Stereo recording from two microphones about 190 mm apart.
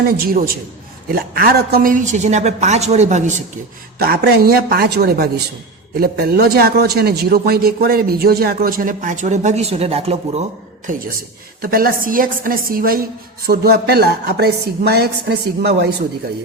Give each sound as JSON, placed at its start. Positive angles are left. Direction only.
{"t": 0.3, "sound": "a man's voice", "side_deg": -50}
{"t": 3.9, "sound": "a man's voice", "side_deg": -55}
{"t": 11.7, "sound": "a man's voice", "side_deg": -50}